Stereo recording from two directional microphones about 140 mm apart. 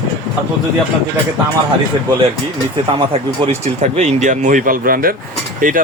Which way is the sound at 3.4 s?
50° right (ahead or behind).